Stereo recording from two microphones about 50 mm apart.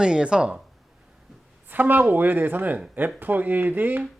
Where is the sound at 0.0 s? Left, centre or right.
Centre.